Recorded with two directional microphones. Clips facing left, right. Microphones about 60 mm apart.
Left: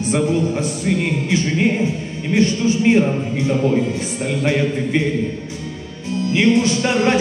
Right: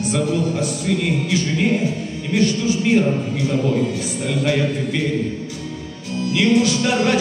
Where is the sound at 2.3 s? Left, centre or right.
Left.